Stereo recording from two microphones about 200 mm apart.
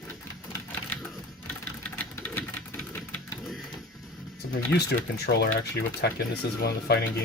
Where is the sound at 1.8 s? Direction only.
10° left (ahead or behind).